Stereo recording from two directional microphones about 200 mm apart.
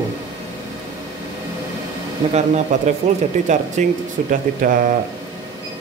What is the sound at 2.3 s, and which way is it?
Speech, 35° right (ahead or behind).